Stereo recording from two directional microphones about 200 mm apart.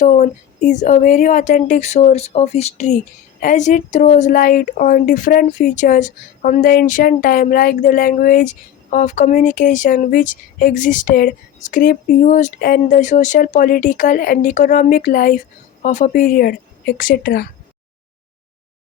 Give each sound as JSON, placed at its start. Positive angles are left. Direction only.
{"t": 0.0, "sound": "a woman's voice", "side_deg": 35}